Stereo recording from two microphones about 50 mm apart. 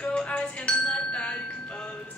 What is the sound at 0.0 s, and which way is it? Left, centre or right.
Music, left.